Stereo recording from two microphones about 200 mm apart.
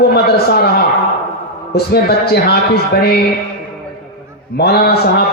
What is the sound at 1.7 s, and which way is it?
Mantra, 50° left (ahead or behind).